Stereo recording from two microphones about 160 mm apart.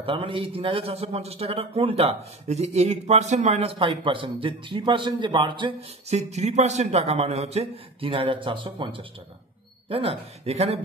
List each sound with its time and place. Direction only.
0.0 s speech: 35° right (ahead or behind)